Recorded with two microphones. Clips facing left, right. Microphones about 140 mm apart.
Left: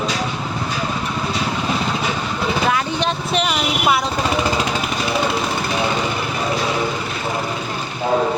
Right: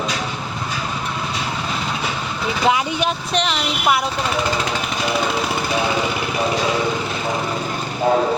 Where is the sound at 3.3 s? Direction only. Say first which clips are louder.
Left 1 dB; 5° left (ahead or behind).